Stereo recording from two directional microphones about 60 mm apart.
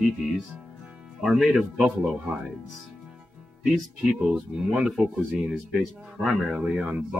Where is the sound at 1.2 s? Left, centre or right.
Centre.